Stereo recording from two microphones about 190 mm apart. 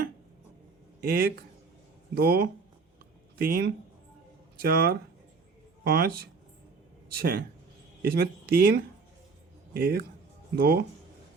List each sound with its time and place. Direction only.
1.0 s speech: 50° right (ahead or behind)